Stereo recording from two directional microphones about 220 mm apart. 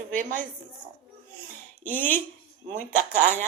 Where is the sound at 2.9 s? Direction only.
30° right (ahead or behind).